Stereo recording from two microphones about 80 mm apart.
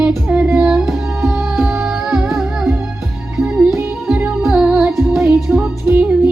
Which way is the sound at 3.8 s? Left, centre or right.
Centre.